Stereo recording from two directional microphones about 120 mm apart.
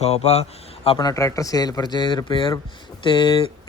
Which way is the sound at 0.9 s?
30° left (ahead or behind).